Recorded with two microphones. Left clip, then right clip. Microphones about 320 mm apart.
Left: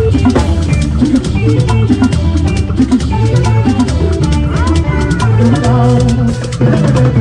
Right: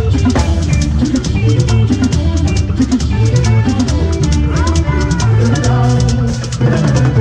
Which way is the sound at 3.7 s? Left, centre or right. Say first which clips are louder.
Left 3 dB; centre.